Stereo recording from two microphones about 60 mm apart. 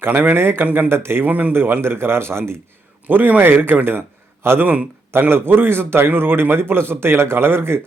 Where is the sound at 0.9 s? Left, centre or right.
Right.